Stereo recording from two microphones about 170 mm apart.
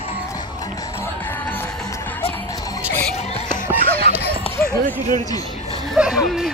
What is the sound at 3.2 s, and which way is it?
Laughter, 35° left (ahead or behind).